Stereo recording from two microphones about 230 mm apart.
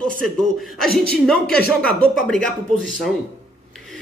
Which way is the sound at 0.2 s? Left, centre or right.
Centre.